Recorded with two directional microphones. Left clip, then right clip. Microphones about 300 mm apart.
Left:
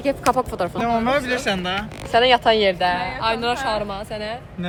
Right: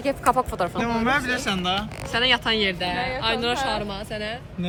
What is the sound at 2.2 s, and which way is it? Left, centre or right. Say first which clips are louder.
Speech: left 4 dB; centre.